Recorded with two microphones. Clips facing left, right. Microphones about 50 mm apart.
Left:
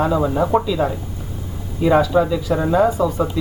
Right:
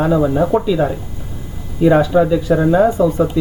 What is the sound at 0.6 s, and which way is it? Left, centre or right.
Speech, centre.